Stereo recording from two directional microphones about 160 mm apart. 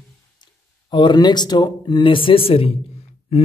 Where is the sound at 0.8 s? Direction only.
30° left (ahead or behind).